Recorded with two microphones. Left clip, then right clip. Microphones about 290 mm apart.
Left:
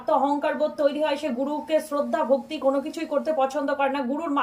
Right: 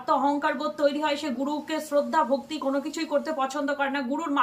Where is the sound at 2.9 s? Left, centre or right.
Centre.